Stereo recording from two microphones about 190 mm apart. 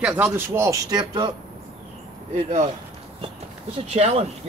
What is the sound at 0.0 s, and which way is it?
A man's voice, 10° right (ahead or behind).